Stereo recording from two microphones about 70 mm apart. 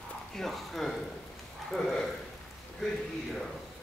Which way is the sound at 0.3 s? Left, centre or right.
Centre.